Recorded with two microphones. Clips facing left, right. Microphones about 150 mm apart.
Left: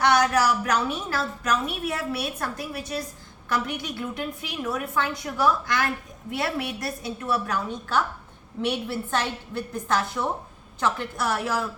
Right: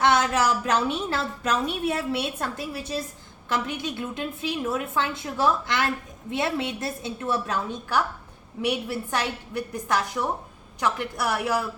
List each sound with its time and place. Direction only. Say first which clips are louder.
0.0 s a woman's voice: left 1 dB; 25° right (ahead or behind)
8.6 s a woman's voice: even; 15° right (ahead or behind)